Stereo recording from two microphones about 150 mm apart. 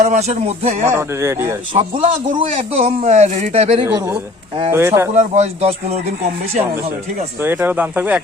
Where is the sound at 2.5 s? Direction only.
50° right (ahead or behind).